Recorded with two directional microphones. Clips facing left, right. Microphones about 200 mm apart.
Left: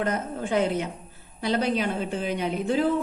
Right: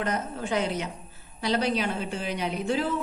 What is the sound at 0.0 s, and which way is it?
A woman's voice, 50° left (ahead or behind).